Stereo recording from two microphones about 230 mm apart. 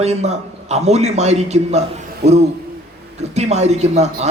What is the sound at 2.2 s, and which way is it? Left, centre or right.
Speech, right.